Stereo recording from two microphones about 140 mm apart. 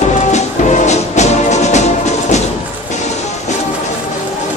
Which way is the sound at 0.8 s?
55° left (ahead or behind).